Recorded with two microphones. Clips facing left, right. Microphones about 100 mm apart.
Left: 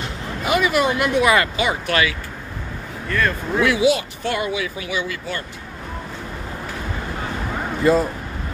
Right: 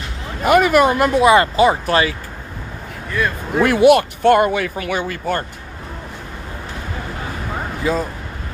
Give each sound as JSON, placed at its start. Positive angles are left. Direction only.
{"t": 0.4, "sound": "speech", "side_deg": -50}
{"t": 1.2, "sound": "speech", "side_deg": -30}
{"t": 3.1, "sound": "speech", "side_deg": -15}
{"t": 3.6, "sound": "speech", "side_deg": -55}
{"t": 7.8, "sound": "speech", "side_deg": 0}